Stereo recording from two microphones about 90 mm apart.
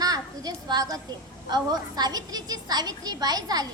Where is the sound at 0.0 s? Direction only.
45° right (ahead or behind).